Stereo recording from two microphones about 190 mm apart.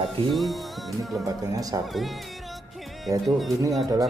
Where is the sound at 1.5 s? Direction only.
20° right (ahead or behind).